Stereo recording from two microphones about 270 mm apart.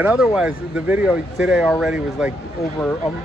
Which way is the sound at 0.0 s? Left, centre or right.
Centre.